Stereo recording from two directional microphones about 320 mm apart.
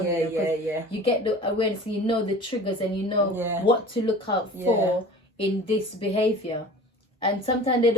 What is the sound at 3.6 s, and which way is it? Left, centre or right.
Speech, centre.